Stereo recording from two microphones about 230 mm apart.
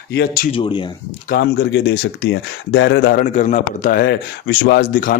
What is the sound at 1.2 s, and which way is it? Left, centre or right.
Speech, left.